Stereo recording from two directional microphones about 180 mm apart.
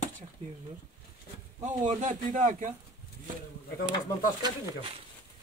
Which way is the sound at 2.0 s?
45° right (ahead or behind).